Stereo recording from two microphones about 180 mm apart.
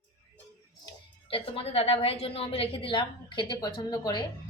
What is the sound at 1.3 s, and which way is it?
A woman's voice, 30° left (ahead or behind).